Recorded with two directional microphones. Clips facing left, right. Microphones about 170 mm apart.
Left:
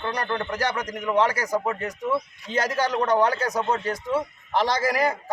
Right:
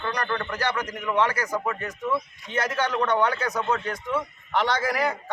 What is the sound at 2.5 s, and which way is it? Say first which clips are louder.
Speech: left 2 dB; 35° left (ahead or behind).